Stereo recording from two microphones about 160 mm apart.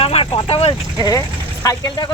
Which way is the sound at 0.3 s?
35° left (ahead or behind).